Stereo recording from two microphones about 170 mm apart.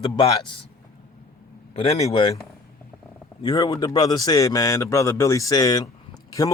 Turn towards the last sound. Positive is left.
turn(degrees=20)  # may be behind; listen again after turning